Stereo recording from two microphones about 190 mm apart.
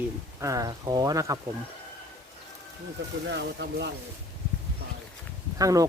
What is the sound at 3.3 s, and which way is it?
Speech, 60° right (ahead or behind).